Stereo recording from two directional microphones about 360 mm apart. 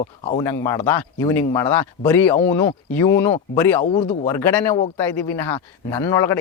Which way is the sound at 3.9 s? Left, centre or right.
Left.